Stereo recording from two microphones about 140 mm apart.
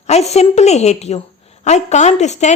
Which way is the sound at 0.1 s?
50° left (ahead or behind).